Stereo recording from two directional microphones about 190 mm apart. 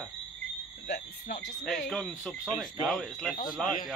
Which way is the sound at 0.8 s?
60° left (ahead or behind).